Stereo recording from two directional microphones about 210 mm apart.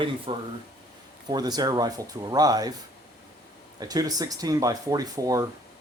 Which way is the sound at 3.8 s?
20° right (ahead or behind).